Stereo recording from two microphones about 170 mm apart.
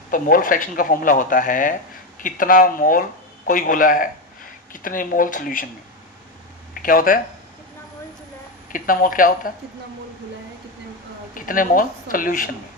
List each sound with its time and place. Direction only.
0.1 s speech: 55° left (ahead or behind)
6.8 s a woman's voice: 55° left (ahead or behind)
8.7 s a woman's voice: 55° left (ahead or behind)
11.3 s speech: 55° left (ahead or behind)